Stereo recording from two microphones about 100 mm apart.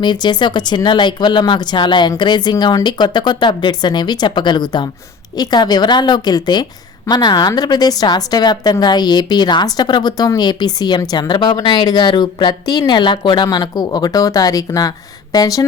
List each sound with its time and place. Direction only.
0.0 s a woman's voice: 50° left (ahead or behind)